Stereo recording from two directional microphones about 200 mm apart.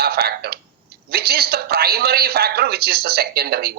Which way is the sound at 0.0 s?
50° right (ahead or behind).